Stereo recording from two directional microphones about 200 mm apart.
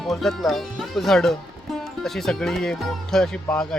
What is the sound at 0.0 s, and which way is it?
Speech, centre (ahead or behind).